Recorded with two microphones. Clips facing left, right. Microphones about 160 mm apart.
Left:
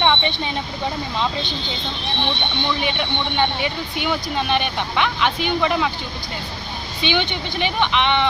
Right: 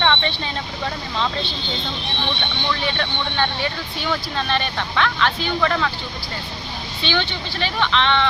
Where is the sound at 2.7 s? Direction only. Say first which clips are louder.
Even; 15° left (ahead or behind).